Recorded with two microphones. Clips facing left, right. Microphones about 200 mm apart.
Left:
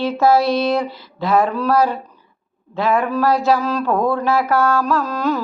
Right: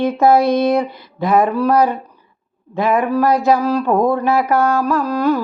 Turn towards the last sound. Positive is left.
turn(degrees=-10)  # may be behind; listen again after turning